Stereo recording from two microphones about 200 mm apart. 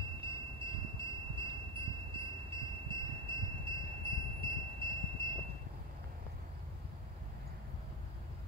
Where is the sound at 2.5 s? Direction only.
25° right (ahead or behind).